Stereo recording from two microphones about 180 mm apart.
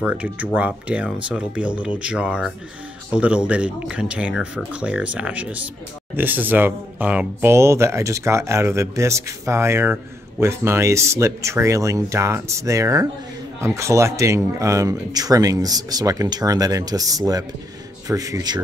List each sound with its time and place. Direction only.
0.0 s speech: 10° right (ahead or behind)